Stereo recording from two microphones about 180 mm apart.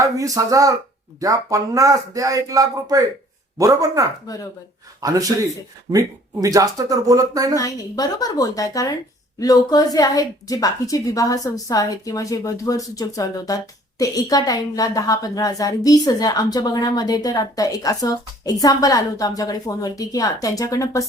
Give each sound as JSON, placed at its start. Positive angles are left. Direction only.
{"t": 0.0, "sound": "speech", "side_deg": -20}
{"t": 7.5, "sound": "a woman's voice", "side_deg": 20}